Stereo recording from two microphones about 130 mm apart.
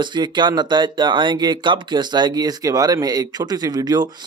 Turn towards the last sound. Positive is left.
turn(degrees=-30)  # may be behind; listen again after turning